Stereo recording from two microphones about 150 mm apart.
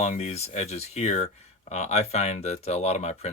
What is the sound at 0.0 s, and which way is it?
Speech, 50° left (ahead or behind).